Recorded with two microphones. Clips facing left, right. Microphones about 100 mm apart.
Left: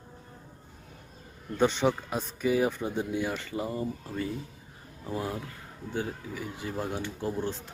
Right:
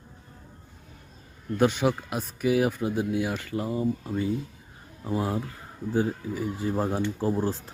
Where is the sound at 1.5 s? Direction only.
10° right (ahead or behind).